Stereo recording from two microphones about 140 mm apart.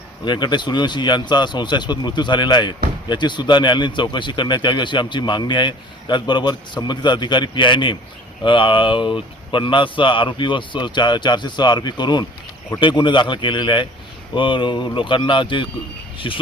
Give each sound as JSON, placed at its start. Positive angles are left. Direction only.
{"t": 0.3, "sound": "a man's voice", "side_deg": 30}